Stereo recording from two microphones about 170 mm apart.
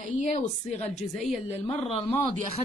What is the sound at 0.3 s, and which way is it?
Speech, 40° left (ahead or behind).